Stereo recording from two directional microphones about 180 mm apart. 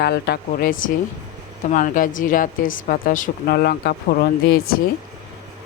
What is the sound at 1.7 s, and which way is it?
Speech, 45° left (ahead or behind).